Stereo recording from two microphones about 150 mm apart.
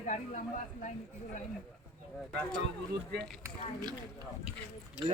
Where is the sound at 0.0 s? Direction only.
55° left (ahead or behind).